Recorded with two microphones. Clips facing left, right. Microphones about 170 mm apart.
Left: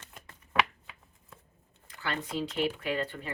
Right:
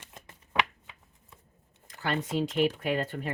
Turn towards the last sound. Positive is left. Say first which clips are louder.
# right 3 dB
turn(degrees=-45)  # may be behind; listen again after turning